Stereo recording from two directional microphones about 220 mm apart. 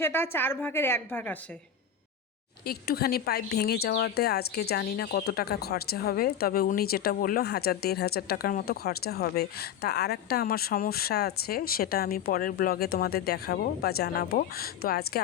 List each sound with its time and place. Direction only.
0.0 s a woman's voice: 10° left (ahead or behind)
2.6 s speech: 45° left (ahead or behind)